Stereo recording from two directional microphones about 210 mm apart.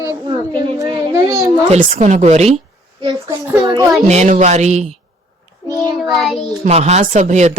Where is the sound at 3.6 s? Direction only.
20° right (ahead or behind).